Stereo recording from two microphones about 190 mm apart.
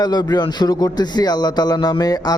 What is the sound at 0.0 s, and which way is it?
Speech, 20° left (ahead or behind).